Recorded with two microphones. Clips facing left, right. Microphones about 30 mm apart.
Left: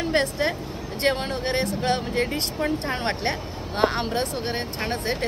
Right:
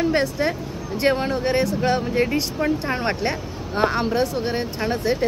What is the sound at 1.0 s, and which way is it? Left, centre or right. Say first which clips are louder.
Speech: right 4 dB; centre.